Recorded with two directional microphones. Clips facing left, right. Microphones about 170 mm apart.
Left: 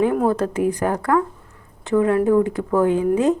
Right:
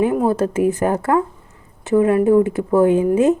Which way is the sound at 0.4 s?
20° right (ahead or behind).